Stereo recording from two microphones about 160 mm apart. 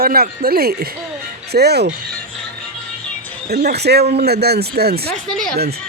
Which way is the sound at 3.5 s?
90° right.